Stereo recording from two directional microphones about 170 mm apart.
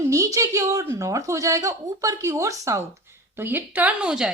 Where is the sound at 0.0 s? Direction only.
20° right (ahead or behind).